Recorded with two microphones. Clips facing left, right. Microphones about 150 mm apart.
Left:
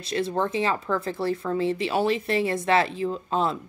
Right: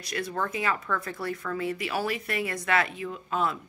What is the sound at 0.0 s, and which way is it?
Speech, 25° left (ahead or behind).